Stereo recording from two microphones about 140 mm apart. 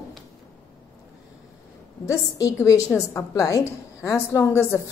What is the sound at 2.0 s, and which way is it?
A woman's voice, 20° left (ahead or behind).